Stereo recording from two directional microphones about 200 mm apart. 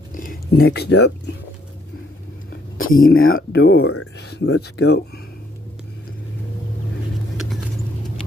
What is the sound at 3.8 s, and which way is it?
Speech, 90° left.